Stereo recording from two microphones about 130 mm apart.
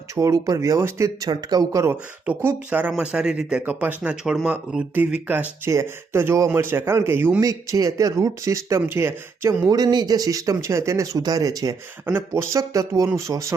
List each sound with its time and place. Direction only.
0.2 s speech: 25° right (ahead or behind)
2.2 s speech: 10° right (ahead or behind)
7.4 s speech: 25° right (ahead or behind)